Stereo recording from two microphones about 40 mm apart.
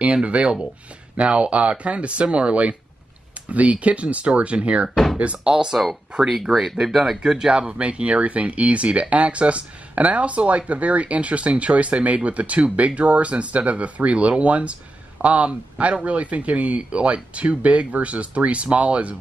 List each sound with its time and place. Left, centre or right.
0.0 s speech: right
6.2 s speech: centre
7.2 s speech: centre
7.7 s speech: right